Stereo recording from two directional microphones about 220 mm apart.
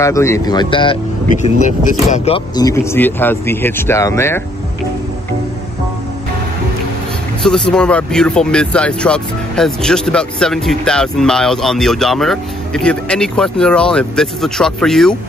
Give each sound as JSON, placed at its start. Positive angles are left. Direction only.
{"t": 0.0, "sound": "speech", "side_deg": 15}
{"t": 7.4, "sound": "speech", "side_deg": 5}